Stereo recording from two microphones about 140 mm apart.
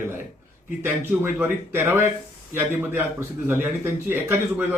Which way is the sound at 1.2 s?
15° right (ahead or behind).